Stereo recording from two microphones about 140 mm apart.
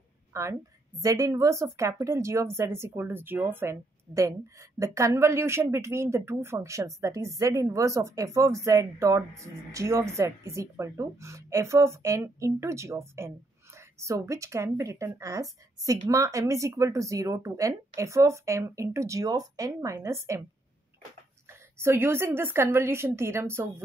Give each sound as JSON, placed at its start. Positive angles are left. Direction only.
{"t": 0.3, "sound": "a woman's voice", "side_deg": -20}
{"t": 21.5, "sound": "a woman's voice", "side_deg": -15}